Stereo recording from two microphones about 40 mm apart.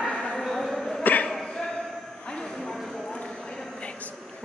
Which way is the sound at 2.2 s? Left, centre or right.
Left.